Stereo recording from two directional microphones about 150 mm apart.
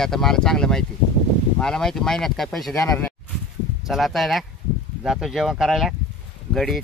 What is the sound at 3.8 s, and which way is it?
Speech, centre (ahead or behind).